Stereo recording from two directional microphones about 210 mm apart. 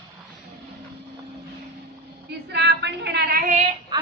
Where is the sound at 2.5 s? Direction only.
55° right (ahead or behind).